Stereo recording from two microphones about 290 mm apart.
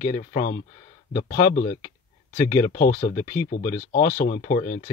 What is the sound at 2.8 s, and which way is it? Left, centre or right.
Speech, left.